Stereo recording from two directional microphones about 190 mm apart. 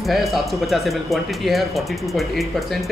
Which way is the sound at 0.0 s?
Centre (ahead or behind).